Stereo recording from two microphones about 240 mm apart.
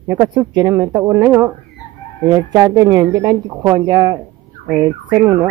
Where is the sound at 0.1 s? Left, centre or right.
Centre.